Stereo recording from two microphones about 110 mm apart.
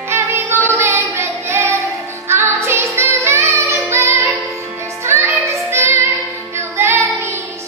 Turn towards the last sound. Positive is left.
turn(degrees=-25)  # may be behind; listen again after turning